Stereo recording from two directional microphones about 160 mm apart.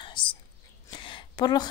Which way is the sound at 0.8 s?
30° left (ahead or behind).